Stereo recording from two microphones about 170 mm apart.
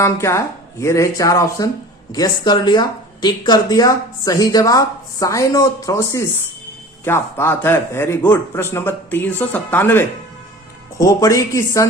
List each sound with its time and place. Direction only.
0.0 s a woman's voice: 15° left (ahead or behind)